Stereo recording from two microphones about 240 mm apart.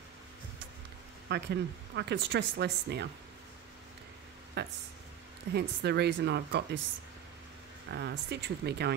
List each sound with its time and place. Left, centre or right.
1.3 s speech: right
4.6 s speech: right
7.9 s speech: right